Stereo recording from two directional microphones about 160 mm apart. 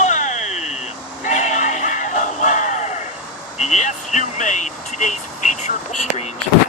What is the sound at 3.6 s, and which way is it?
Vehicle, 45° left (ahead or behind).